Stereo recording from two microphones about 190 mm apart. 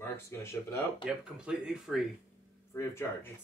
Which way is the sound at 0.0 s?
15° left (ahead or behind).